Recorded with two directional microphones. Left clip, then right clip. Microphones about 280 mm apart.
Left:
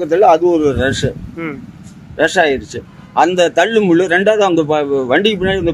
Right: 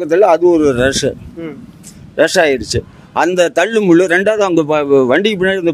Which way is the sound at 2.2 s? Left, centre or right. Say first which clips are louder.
Right 2 dB; right.